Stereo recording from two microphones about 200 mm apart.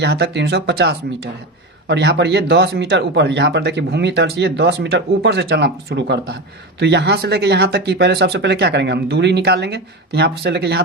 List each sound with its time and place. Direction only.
0.0 s speech: 55° right (ahead or behind)